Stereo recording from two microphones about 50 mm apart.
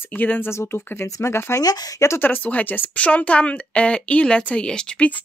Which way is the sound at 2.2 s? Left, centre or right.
Left.